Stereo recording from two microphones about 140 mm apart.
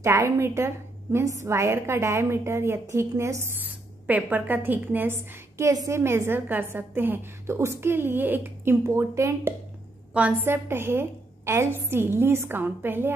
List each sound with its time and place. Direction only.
0.0 s a woman's voice: 20° right (ahead or behind)